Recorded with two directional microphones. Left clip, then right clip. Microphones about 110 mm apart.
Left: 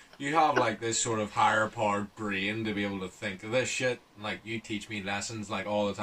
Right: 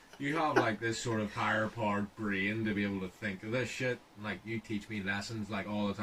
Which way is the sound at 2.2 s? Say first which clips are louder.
Left 2 dB; 30° left (ahead or behind).